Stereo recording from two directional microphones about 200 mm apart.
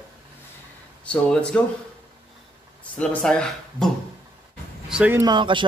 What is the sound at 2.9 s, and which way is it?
Speech, 5° left (ahead or behind).